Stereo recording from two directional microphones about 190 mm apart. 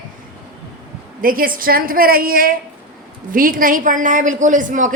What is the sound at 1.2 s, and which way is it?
A woman's voice, 50° right (ahead or behind).